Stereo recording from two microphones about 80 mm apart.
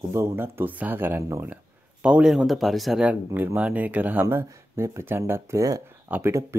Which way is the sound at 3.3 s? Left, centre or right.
Right.